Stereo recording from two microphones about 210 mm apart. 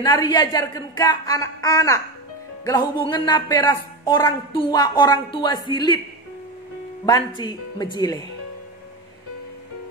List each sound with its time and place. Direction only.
0.0 s a woman's voice: 20° left (ahead or behind)
7.1 s speech: 20° left (ahead or behind)